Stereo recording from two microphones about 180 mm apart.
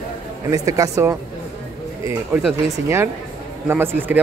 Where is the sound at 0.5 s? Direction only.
20° right (ahead or behind).